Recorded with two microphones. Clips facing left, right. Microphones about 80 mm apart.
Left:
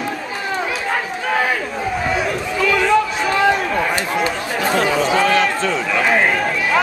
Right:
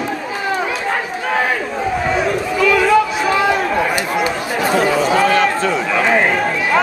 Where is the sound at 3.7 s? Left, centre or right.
Centre.